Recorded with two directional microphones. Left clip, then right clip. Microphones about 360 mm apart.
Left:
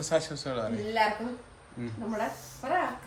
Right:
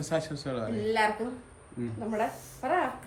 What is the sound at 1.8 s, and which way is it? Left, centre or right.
Speech, centre.